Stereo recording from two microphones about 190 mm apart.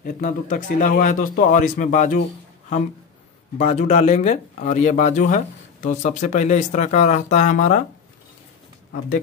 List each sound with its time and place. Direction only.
0.0 s speech: 45° left (ahead or behind)
3.5 s speech: 35° left (ahead or behind)